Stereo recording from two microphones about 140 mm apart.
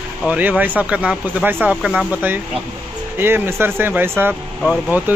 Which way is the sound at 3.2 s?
15° right (ahead or behind).